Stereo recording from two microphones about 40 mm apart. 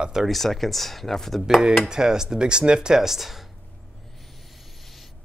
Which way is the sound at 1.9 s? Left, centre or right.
Centre.